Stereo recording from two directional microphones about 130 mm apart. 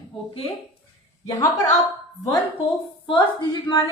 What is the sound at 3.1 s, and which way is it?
Speech, 35° left (ahead or behind).